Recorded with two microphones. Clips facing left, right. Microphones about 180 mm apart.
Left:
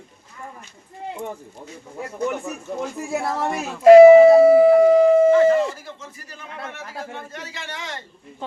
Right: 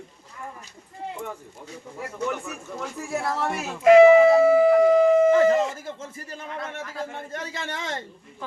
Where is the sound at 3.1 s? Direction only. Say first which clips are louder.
Left 2 dB; 20° left (ahead or behind).